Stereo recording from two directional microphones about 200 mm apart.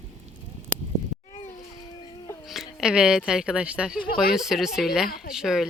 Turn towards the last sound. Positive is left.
turn(degrees=0)  # may be behind; listen again after turning